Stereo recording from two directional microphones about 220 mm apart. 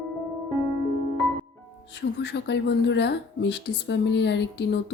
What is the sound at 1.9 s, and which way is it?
Speech, 50° left (ahead or behind).